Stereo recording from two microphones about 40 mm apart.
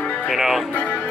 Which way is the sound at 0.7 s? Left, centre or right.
Left.